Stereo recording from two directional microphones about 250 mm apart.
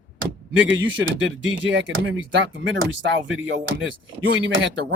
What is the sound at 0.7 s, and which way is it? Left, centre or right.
Speech, right.